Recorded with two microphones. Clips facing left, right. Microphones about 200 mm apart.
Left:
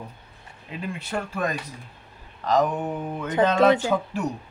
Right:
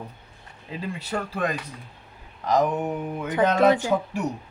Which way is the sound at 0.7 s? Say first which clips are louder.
Even; 30° right (ahead or behind).